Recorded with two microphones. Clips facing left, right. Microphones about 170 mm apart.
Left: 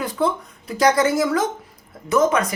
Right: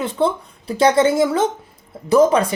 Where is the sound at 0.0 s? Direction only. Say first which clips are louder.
Right 3 dB; 25° right (ahead or behind).